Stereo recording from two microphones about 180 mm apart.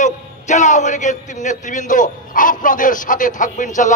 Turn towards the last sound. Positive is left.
turn(degrees=45)  # may be behind; listen again after turning